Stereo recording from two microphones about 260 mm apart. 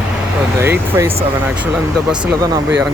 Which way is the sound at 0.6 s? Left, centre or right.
Centre.